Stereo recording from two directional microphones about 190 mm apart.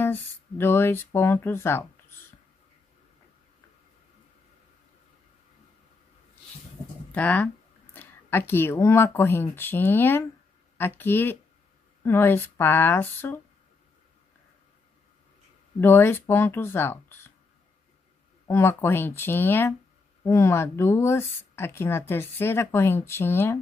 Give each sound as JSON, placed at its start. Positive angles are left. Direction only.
{"t": 0.0, "sound": "speech", "side_deg": 10}
{"t": 7.1, "sound": "speech", "side_deg": 5}
{"t": 15.8, "sound": "speech", "side_deg": 10}
{"t": 18.5, "sound": "speech", "side_deg": 15}